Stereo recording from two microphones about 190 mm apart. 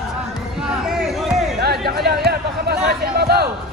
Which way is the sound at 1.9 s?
55° right (ahead or behind).